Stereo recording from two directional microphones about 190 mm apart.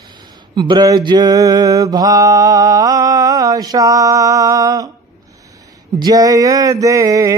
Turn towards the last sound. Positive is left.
turn(degrees=-20)  # may be behind; listen again after turning